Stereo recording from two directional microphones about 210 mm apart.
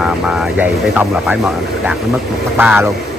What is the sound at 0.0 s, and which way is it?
Speech, 5° right (ahead or behind).